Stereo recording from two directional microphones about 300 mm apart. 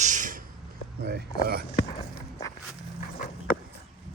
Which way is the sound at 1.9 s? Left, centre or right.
Centre.